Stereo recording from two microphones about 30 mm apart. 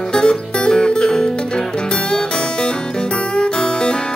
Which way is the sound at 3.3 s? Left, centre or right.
Left.